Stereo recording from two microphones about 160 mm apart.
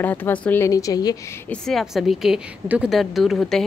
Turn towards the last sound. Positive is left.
turn(degrees=0)  # may be behind; listen again after turning